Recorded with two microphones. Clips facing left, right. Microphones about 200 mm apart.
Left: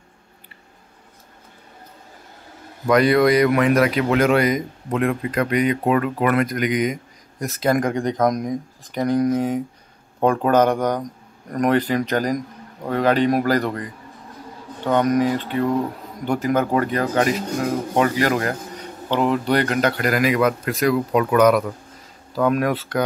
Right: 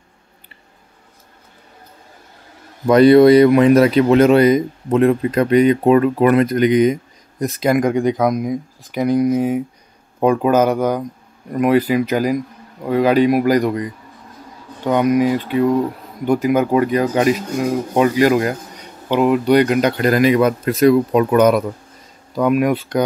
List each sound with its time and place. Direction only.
2.9 s speech: 30° right (ahead or behind)
14.9 s speech: 10° right (ahead or behind)